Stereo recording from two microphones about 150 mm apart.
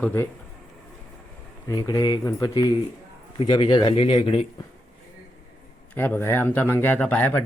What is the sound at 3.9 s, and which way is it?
Speech, 40° left (ahead or behind).